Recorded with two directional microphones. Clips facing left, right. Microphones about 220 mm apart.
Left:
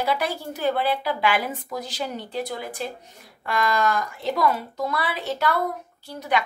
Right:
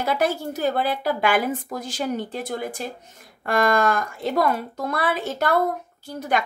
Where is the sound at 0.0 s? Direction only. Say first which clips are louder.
Right 3 dB; 45° right (ahead or behind).